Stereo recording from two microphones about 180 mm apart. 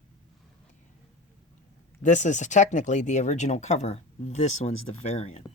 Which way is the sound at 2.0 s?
40° left (ahead or behind).